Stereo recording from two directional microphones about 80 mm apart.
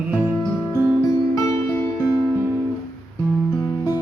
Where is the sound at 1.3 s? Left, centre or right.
Left.